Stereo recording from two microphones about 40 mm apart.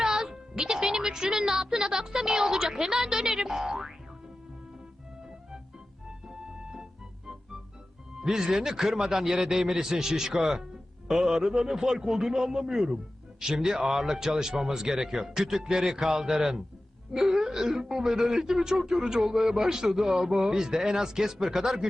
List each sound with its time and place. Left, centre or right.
0.0 s music: centre
0.9 s speech: centre
8.2 s speech: centre